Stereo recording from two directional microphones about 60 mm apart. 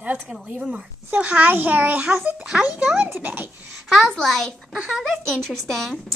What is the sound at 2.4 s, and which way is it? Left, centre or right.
A child's voice, centre.